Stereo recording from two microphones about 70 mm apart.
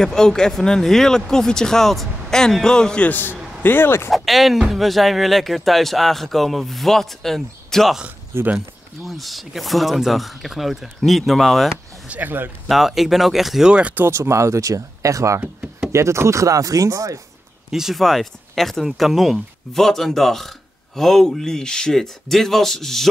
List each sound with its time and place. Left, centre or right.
0.0 s speech: centre
3.1 s a man's voice: left
4.1 s speech: centre
11.7 s speech: right
12.6 s speech: centre
13.9 s speech: right
15.4 s a sound: centre
15.9 s speech: right
17.6 s speech: centre